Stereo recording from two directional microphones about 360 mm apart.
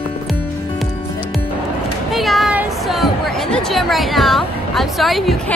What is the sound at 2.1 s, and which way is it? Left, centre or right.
Speech, centre.